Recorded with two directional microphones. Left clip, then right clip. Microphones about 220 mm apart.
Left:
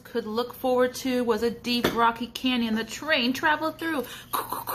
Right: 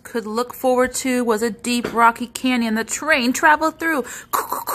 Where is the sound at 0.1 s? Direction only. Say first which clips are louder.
Right 5 dB; 50° right (ahead or behind).